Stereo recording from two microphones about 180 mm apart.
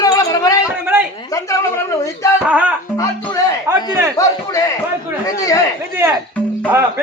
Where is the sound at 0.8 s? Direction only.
10° right (ahead or behind).